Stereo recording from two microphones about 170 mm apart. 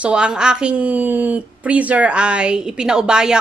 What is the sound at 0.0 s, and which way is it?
A woman's voice, 5° right (ahead or behind).